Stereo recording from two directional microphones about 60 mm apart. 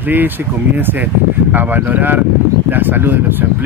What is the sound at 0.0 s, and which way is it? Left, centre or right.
Speech, right.